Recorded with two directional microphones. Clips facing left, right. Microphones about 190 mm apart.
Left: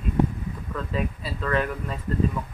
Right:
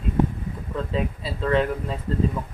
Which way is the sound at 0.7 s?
25° right (ahead or behind).